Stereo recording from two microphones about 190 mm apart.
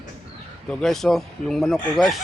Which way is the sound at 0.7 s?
5° left (ahead or behind).